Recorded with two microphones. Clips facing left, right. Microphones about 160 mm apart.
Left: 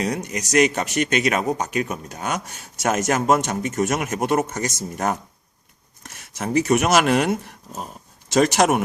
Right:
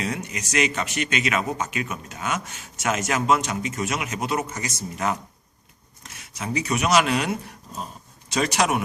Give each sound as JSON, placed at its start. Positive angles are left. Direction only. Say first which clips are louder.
{"t": 0.0, "sound": "speech", "louder": "left 4 dB", "side_deg": 40}